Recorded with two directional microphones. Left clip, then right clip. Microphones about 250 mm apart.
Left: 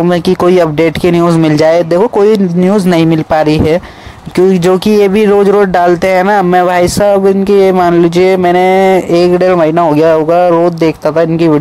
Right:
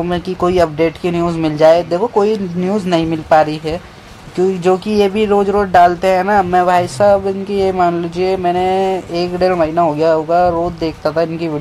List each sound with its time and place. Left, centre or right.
0.1 s speech: left